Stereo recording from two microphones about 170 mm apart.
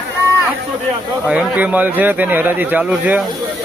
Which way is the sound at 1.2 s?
10° right (ahead or behind).